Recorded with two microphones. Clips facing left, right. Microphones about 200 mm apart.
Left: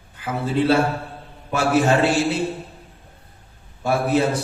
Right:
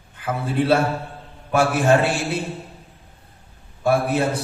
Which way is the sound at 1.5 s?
55° right (ahead or behind).